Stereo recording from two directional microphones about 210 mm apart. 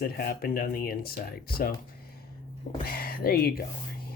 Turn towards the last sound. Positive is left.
turn(degrees=45)  # may be behind; listen again after turning